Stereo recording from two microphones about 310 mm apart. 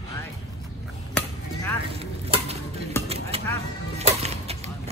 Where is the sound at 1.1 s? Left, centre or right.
Centre.